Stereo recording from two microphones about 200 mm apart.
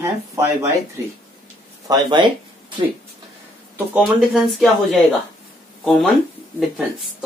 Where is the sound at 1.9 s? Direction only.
25° right (ahead or behind).